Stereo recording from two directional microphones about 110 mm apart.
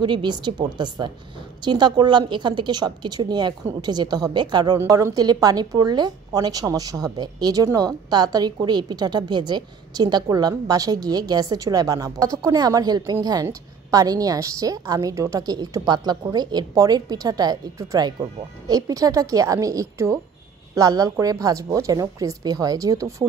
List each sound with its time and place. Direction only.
0.0 s a woman's voice: 45° right (ahead or behind)
4.7 s speech: 25° right (ahead or behind)